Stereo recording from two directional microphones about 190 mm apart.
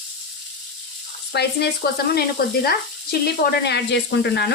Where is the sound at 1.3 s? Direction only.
55° left (ahead or behind).